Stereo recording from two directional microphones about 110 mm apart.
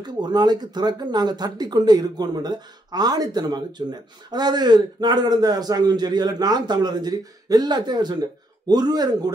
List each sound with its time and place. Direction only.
0.0 s speech: 40° right (ahead or behind)